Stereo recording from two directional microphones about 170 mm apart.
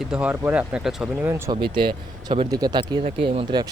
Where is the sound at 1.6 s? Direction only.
30° right (ahead or behind).